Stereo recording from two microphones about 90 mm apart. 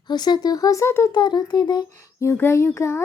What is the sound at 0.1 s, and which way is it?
Speech, 50° left (ahead or behind).